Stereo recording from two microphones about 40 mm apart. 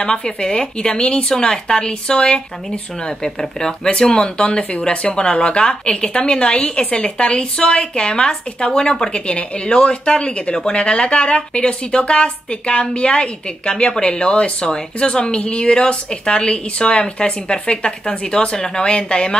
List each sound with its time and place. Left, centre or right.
0.0 s speech: left